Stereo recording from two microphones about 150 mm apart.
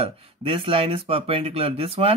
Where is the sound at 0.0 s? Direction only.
35° right (ahead or behind).